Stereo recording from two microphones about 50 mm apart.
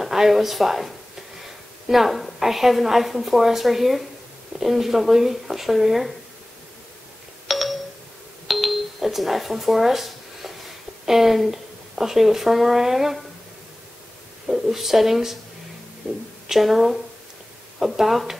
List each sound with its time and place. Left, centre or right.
0.0 s a woman's voice: centre
7.4 s doorbell: centre
8.5 s a sound: centre
11.1 s speech: centre
14.5 s a woman's voice: centre
16.0 s a woman's voice: right
16.4 s a woman's voice: centre